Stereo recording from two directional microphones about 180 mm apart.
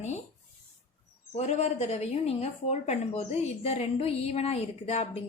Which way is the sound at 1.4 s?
40° left (ahead or behind).